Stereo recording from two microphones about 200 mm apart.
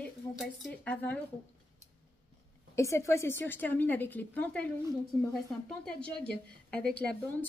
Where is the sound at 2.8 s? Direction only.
15° left (ahead or behind).